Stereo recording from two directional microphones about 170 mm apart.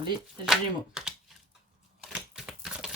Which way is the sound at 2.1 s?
5° right (ahead or behind).